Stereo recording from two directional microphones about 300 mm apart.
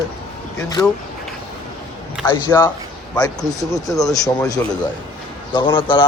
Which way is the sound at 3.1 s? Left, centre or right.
Centre.